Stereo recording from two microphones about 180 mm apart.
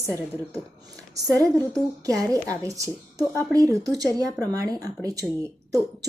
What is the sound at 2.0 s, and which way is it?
Speech, 20° right (ahead or behind).